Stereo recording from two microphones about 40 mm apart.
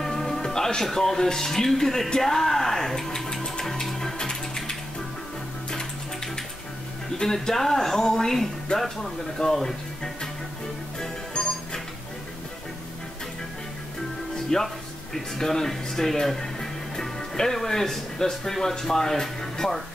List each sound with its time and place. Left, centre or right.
0.0 s music: centre
0.9 s speech: centre
3.2 s music: centre
5.7 s a sound: centre
7.2 s speech: centre
11.0 s music: centre
14.3 s music: centre
15.1 s speech: centre